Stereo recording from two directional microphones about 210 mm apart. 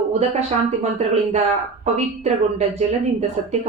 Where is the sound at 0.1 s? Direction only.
30° right (ahead or behind).